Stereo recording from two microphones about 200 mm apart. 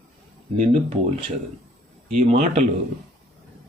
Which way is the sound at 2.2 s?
30° right (ahead or behind).